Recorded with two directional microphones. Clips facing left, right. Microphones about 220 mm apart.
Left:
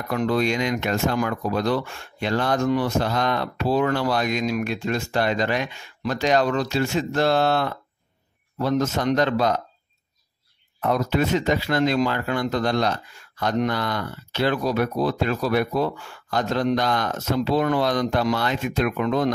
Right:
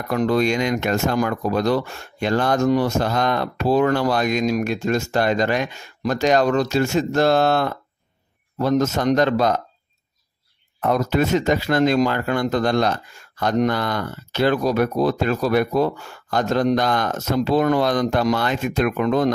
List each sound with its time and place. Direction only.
0.1 s speech: 45° right (ahead or behind)
10.8 s speech: 45° right (ahead or behind)